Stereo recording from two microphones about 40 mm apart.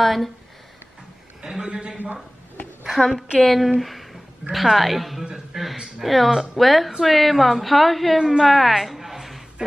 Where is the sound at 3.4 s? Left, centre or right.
Centre.